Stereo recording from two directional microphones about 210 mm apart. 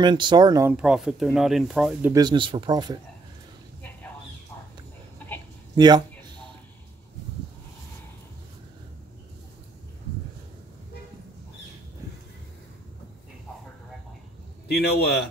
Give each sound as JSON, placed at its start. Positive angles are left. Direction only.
{"t": 0.0, "sound": "speech", "side_deg": -20}
{"t": 0.7, "sound": "speech", "side_deg": -5}
{"t": 2.1, "sound": "speech", "side_deg": -20}
{"t": 5.8, "sound": "speech", "side_deg": -20}
{"t": 14.7, "sound": "a man's voice", "side_deg": 50}